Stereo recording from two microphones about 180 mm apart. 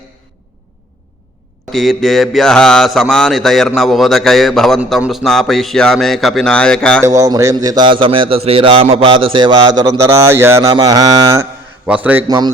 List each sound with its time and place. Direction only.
1.7 s speech: centre (ahead or behind)
7.0 s a man's voice: 20° right (ahead or behind)
11.9 s speech: 10° right (ahead or behind)